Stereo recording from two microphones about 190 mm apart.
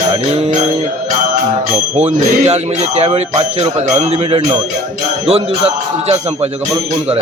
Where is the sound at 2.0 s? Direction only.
35° right (ahead or behind).